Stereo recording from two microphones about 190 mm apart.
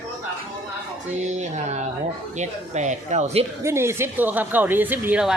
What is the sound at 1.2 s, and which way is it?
Speech, 40° right (ahead or behind).